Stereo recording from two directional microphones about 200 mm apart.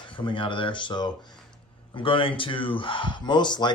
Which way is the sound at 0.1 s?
25° left (ahead or behind).